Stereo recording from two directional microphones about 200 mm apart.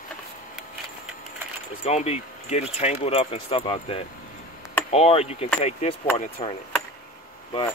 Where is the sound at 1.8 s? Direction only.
30° left (ahead or behind).